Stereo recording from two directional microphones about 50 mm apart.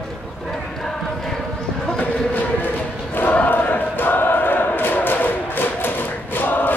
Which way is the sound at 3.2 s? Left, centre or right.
Left.